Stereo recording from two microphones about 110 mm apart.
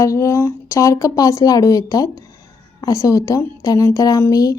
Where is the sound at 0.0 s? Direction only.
30° left (ahead or behind).